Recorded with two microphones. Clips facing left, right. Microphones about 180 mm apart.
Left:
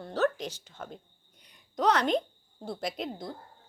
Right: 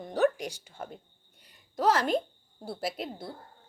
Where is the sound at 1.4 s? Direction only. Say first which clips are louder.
Even; 5° right (ahead or behind).